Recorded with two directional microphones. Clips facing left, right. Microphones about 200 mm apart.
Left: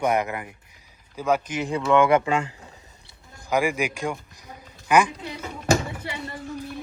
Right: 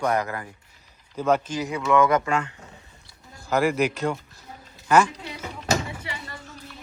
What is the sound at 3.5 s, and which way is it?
A man's voice, 10° left (ahead or behind).